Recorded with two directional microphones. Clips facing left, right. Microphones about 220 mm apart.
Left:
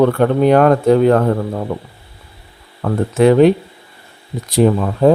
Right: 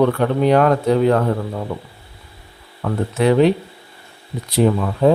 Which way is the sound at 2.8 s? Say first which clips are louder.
Left 5 dB; 45° left (ahead or behind).